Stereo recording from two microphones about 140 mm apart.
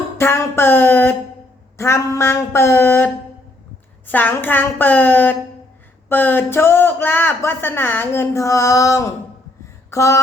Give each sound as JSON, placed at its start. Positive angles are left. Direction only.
{"t": 0.2, "sound": "speech", "side_deg": 15}
{"t": 1.8, "sound": "a sound", "side_deg": 20}
{"t": 4.0, "sound": "speech", "side_deg": 15}